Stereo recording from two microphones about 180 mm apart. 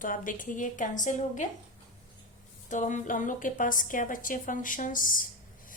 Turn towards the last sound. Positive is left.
turn(degrees=50)  # may be behind; listen again after turning